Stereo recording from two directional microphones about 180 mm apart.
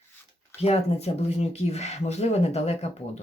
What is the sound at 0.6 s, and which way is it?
Speech, 35° left (ahead or behind).